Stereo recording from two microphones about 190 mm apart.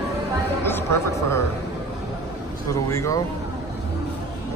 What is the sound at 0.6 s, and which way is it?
Speech, 15° left (ahead or behind).